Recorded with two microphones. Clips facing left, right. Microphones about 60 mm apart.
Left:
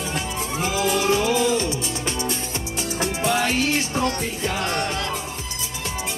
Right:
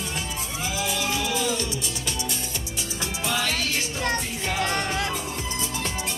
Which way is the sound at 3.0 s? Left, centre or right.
Left.